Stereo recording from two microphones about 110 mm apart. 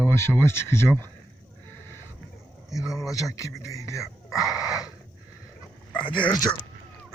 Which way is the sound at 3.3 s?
30° left (ahead or behind).